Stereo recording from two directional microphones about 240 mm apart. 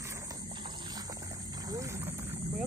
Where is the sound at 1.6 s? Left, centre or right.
Centre.